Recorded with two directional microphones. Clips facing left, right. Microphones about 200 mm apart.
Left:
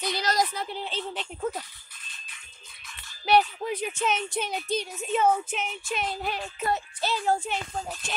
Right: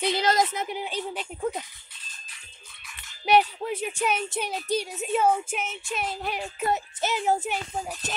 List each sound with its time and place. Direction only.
0.0 s speech: 25° right (ahead or behind); by 1.6 s 10° right (ahead or behind)
3.1 s music: 15° right (ahead or behind)
3.5 s speech: centre (ahead or behind)
3.9 s a woman's voice: 10° right (ahead or behind)
5.5 s music: 5° right (ahead or behind)
6.6 s a woman's voice: 20° right (ahead or behind)